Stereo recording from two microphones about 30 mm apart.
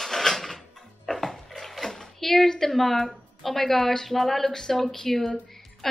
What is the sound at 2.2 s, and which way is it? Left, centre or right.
A woman's voice, centre.